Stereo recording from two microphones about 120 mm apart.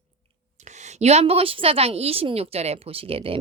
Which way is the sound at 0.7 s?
75° right (ahead or behind).